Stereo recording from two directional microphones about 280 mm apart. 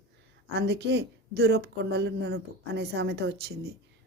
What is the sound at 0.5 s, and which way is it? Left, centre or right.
Speech, right.